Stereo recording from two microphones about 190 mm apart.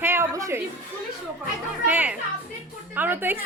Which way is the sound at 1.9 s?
10° right (ahead or behind).